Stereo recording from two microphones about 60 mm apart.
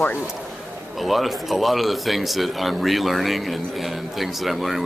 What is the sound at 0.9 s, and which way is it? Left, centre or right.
Speech, centre.